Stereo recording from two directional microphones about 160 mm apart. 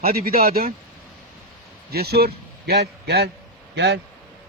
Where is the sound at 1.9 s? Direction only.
85° right.